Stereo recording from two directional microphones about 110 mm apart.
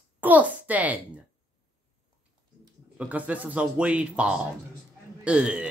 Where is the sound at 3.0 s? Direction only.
15° right (ahead or behind).